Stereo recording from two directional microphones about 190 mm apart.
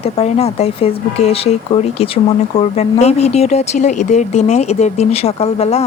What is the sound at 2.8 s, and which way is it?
Speech, 35° left (ahead or behind).